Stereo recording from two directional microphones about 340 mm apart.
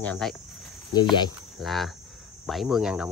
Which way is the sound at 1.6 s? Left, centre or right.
Centre.